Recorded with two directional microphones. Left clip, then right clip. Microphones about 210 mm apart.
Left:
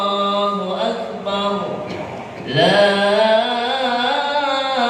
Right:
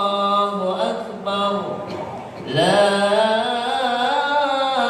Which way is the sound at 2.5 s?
25° right (ahead or behind).